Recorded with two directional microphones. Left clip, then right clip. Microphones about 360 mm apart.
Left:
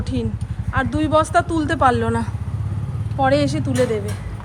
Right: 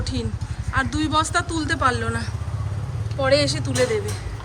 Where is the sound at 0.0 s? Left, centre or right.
Centre.